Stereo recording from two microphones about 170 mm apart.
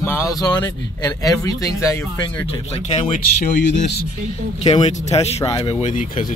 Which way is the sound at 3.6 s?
90° left.